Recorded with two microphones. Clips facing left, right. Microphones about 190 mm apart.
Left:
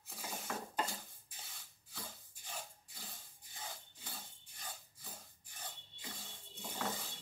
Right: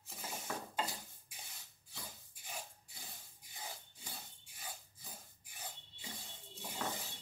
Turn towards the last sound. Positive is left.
turn(degrees=-10)  # may be behind; listen again after turning